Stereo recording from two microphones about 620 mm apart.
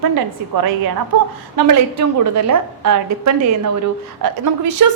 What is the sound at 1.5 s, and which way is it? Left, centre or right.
A woman's voice, right.